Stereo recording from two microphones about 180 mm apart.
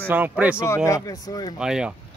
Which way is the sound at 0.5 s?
15° left (ahead or behind).